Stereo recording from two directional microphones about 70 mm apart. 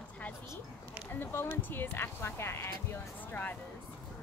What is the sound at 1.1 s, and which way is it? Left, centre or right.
Speech, left.